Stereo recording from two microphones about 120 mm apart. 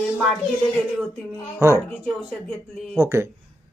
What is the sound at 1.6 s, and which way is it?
Speech, 25° right (ahead or behind).